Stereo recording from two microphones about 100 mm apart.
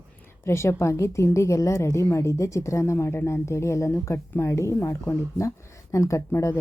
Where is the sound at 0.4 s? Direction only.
25° left (ahead or behind).